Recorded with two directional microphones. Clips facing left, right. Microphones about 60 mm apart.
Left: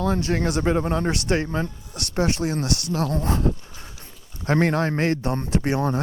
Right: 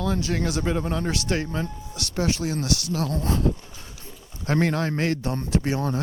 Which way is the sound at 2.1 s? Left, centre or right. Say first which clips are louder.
Left 2 dB; left.